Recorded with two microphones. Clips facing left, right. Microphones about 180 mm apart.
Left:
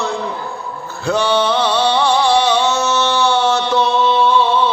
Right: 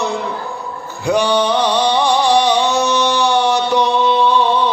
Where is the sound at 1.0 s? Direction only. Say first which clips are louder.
Right 1 dB; 15° right (ahead or behind).